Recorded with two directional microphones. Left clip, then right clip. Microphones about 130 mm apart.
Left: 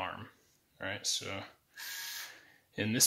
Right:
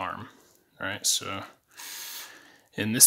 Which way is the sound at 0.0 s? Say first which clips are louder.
Right 6 dB; 45° right (ahead or behind).